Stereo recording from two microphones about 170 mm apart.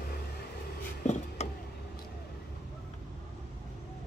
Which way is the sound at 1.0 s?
45° left (ahead or behind).